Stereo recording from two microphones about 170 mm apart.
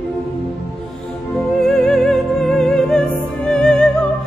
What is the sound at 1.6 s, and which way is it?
Music, centre (ahead or behind).